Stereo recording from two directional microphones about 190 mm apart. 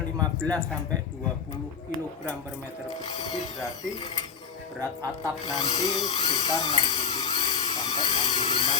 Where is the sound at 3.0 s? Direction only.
35° left (ahead or behind).